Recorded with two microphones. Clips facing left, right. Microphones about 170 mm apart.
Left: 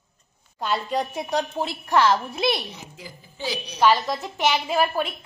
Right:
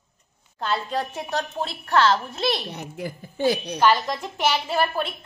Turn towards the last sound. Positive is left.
turn(degrees=5)  # may be behind; listen again after turning